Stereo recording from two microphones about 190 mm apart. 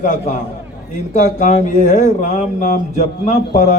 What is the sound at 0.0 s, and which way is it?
Speech, 40° left (ahead or behind).